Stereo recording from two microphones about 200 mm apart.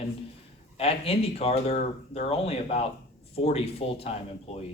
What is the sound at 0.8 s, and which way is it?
A man's voice, 30° left (ahead or behind).